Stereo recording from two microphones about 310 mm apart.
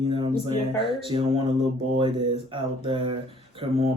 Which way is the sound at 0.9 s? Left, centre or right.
Centre.